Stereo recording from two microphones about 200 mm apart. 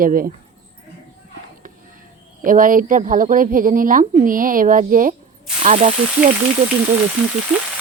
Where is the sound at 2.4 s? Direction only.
45° right (ahead or behind).